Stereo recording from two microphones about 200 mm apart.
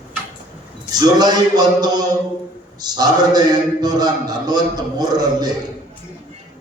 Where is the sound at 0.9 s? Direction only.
20° right (ahead or behind).